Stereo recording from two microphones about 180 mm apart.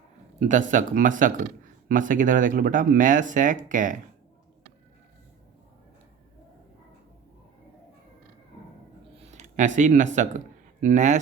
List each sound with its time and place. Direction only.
0.3 s speech: 45° right (ahead or behind)
9.2 s speech: 40° right (ahead or behind)